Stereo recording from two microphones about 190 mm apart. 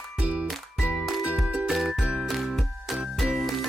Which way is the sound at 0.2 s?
5° right (ahead or behind).